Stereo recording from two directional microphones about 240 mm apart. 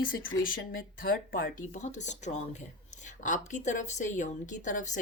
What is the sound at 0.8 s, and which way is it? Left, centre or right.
A woman's voice, left.